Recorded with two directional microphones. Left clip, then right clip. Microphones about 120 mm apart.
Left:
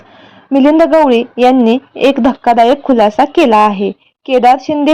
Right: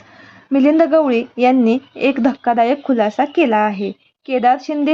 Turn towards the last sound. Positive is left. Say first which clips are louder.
# left 6 dB
turn(degrees=20)  # may be behind; listen again after turning